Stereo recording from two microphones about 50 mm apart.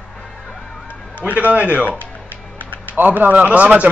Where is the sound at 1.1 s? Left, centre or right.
Right.